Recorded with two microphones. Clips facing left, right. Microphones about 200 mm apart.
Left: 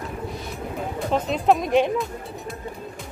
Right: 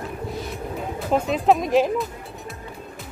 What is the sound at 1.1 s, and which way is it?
Speech, centre (ahead or behind).